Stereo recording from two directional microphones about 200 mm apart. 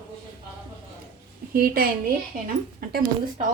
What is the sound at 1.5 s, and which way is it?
Speech, 45° right (ahead or behind).